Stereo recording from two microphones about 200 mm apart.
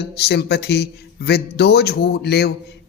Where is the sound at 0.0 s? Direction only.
55° left (ahead or behind).